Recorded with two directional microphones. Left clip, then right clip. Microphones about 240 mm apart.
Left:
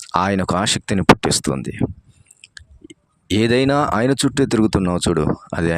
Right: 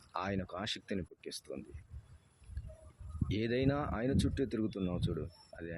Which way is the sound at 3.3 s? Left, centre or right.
Left.